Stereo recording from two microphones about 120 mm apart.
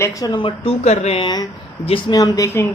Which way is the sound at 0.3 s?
50° left (ahead or behind).